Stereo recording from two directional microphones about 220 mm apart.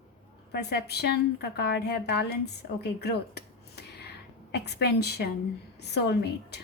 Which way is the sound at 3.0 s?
50° left (ahead or behind).